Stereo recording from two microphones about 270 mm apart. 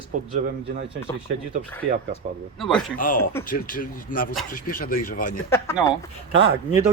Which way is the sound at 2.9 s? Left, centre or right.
Left.